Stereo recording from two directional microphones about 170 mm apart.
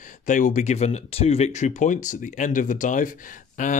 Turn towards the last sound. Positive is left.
turn(degrees=45)  # may be behind; listen again after turning